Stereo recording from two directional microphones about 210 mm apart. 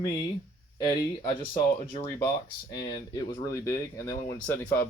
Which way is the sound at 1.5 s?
25° left (ahead or behind).